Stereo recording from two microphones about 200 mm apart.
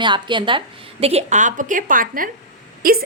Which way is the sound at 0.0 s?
25° right (ahead or behind).